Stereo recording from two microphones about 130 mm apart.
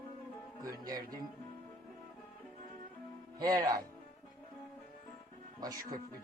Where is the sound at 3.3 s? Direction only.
30° right (ahead or behind).